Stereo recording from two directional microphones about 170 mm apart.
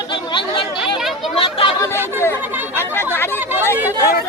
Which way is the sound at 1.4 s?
30° left (ahead or behind).